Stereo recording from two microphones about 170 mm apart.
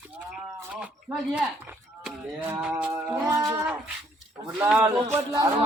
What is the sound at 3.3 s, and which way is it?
Speech, 20° right (ahead or behind).